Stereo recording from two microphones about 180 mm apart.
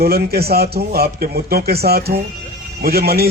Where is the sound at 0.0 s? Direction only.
60° right (ahead or behind).